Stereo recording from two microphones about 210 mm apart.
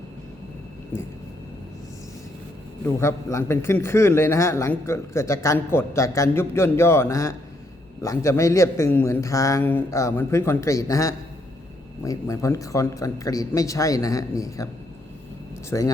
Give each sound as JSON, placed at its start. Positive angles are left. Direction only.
{"t": 0.9, "sound": "a man's voice", "side_deg": 10}
{"t": 2.8, "sound": "a man's voice", "side_deg": 10}
{"t": 15.7, "sound": "a man's voice", "side_deg": 15}